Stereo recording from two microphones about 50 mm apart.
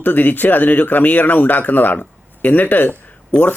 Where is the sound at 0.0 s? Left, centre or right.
Left.